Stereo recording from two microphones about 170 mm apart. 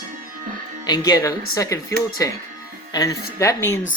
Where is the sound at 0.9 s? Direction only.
25° left (ahead or behind).